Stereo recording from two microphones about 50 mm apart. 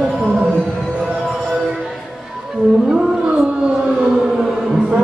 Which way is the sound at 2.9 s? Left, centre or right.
Centre.